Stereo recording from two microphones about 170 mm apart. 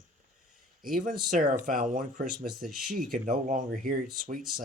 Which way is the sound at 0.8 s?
55° right (ahead or behind).